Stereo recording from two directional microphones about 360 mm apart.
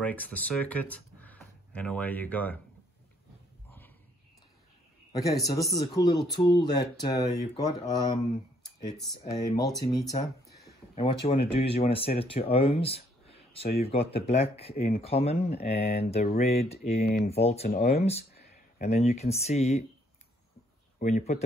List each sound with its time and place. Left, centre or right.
0.0 s speech: centre
5.1 s speech: centre
9.8 s speech: centre
10.5 s a sound: left
11.1 s speech: centre
21.0 s speech: centre